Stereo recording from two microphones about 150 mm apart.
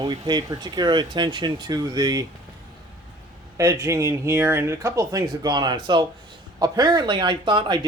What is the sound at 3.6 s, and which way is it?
Speech, 20° right (ahead or behind).